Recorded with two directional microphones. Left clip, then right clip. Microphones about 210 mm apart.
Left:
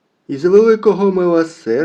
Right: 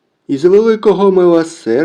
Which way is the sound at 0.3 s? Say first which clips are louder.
Right 1 dB; 25° right (ahead or behind).